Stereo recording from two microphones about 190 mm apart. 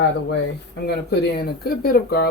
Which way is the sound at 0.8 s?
60° left (ahead or behind).